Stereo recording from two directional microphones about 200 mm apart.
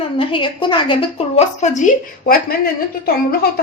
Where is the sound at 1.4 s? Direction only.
35° left (ahead or behind).